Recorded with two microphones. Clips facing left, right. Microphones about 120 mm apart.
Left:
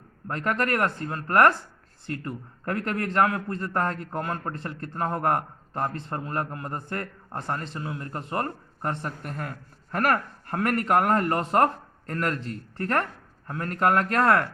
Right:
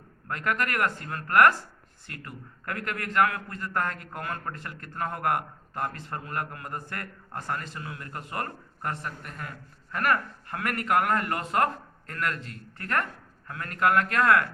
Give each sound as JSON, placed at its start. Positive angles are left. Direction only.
{"t": 0.3, "sound": "a man's voice", "side_deg": 35}
{"t": 9.2, "sound": "a man's voice", "side_deg": 40}